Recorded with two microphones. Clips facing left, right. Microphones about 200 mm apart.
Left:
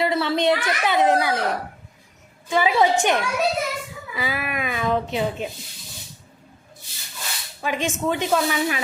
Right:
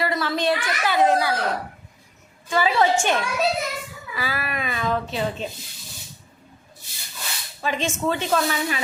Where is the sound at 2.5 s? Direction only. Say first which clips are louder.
Left 1 dB; 15° left (ahead or behind).